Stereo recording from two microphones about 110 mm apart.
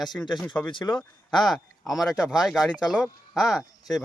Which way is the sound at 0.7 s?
45° left (ahead or behind).